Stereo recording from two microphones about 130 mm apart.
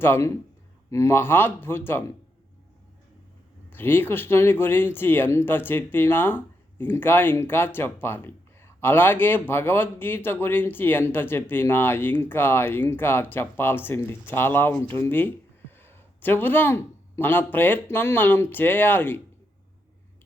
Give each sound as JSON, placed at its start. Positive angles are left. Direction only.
{"t": 0.0, "sound": "a man's voice", "side_deg": 20}
{"t": 3.7, "sound": "speech", "side_deg": 15}